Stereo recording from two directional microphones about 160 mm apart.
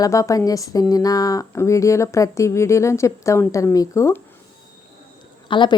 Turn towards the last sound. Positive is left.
turn(degrees=30)  # may be behind; listen again after turning